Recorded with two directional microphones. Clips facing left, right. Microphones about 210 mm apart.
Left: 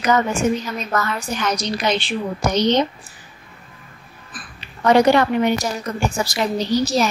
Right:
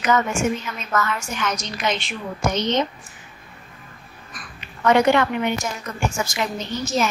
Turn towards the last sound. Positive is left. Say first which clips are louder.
# left 5 dB
turn(degrees=35)  # may be behind; listen again after turning